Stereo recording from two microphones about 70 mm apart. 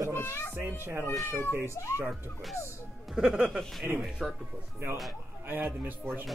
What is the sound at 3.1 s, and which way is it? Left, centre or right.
Speech, centre.